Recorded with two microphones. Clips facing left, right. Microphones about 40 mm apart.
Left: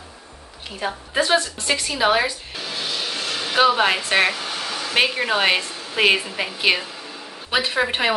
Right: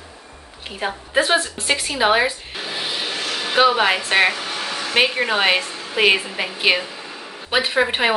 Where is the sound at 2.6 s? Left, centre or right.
Right.